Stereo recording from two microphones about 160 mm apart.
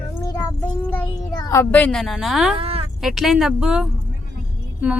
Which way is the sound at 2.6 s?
35° right (ahead or behind).